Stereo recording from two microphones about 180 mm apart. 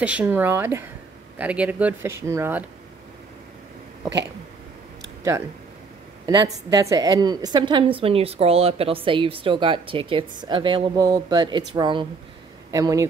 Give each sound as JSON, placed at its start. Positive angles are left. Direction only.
{"t": 0.0, "sound": "speech", "side_deg": -10}
{"t": 6.2, "sound": "a woman's voice", "side_deg": -20}